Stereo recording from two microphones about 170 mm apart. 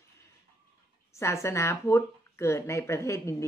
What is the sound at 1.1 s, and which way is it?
Speech, 15° left (ahead or behind).